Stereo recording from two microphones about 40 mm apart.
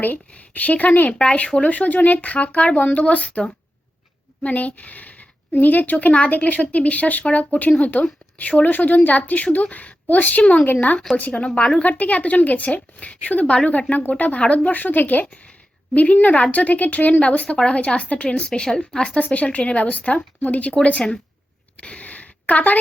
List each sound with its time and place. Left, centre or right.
0.0 s speech: left
4.4 s speech: left
5.5 s speech: left
10.4 s speech: left
10.8 s speech: left
11.2 s speech: left
13.5 s a woman's voice: left
19.0 s speech: left
21.8 s a sound: left